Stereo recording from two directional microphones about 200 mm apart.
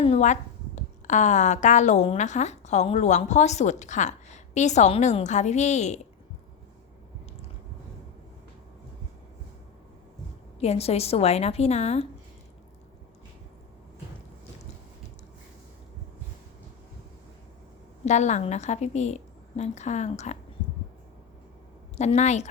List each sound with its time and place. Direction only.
0.0 s a woman's voice: 35° left (ahead or behind)
10.6 s a woman's voice: 30° left (ahead or behind)
18.0 s a woman's voice: 35° left (ahead or behind)
21.9 s a woman's voice: 35° left (ahead or behind)